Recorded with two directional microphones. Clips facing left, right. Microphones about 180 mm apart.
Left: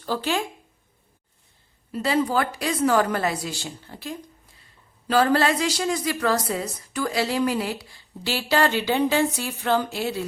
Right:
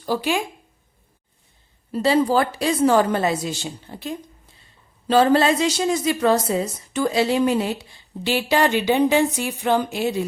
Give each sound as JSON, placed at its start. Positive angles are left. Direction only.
{"t": 0.0, "sound": "speech", "side_deg": -10}
{"t": 1.9, "sound": "a woman's voice", "side_deg": -30}